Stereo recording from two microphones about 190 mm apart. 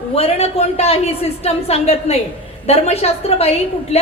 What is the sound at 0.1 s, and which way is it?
Speech, 30° left (ahead or behind).